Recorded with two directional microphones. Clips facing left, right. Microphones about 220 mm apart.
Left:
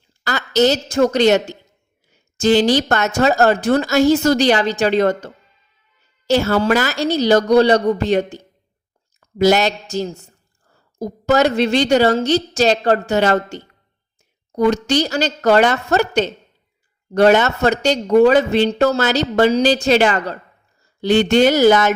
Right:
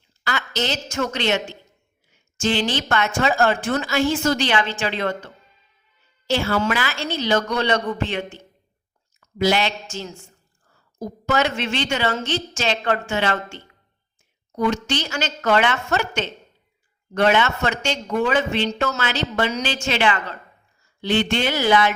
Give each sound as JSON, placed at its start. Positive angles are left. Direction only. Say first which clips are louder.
{"t": 0.3, "sound": "speech", "louder": "left 10 dB", "side_deg": 40}